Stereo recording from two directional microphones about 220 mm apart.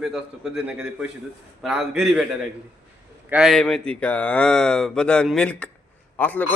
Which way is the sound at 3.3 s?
Centre (ahead or behind).